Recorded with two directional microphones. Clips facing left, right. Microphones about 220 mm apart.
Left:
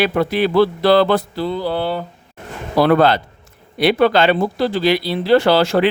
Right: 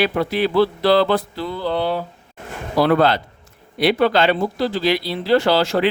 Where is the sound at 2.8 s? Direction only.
55° left (ahead or behind).